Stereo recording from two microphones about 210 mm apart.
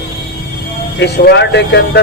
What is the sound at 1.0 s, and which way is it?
Speech, 55° left (ahead or behind).